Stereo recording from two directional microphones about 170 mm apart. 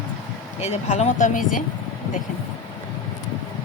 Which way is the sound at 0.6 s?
40° left (ahead or behind).